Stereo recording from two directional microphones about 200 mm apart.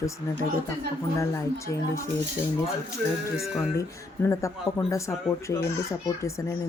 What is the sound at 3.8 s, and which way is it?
Speech, 15° left (ahead or behind).